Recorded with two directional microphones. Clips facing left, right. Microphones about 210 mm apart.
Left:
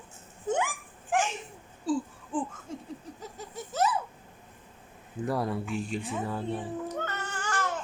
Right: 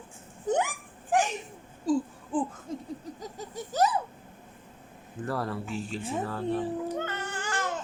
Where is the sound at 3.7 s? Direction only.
35° right (ahead or behind).